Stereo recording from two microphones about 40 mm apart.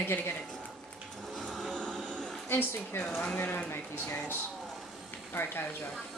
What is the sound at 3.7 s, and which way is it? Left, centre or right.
Speech, left.